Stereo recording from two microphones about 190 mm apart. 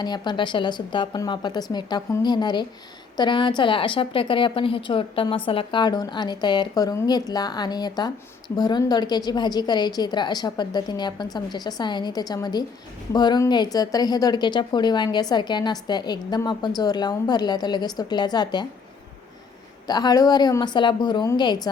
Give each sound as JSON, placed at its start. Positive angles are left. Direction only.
{"t": 0.0, "sound": "a woman's voice", "side_deg": 20}
{"t": 19.9, "sound": "a woman's voice", "side_deg": 20}